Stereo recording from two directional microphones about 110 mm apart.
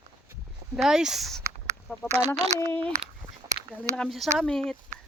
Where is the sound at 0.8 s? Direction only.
5° right (ahead or behind).